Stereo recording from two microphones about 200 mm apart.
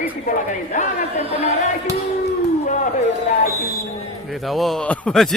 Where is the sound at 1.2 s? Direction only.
30° right (ahead or behind).